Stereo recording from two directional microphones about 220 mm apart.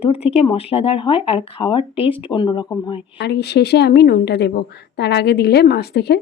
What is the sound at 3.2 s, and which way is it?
A woman's voice, 50° left (ahead or behind).